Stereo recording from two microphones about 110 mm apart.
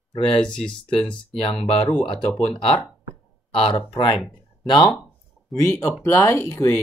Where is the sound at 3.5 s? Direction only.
55° left (ahead or behind).